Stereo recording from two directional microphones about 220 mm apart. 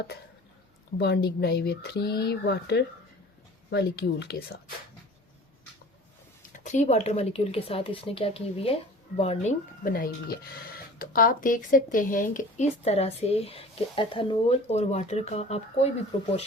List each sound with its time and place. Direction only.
0.9 s speech: 50° left (ahead or behind)
6.5 s speech: 35° left (ahead or behind)